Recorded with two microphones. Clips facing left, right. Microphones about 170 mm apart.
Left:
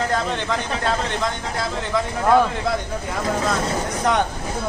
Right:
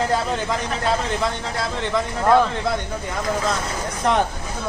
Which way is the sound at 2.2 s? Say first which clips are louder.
Even; 5° left (ahead or behind).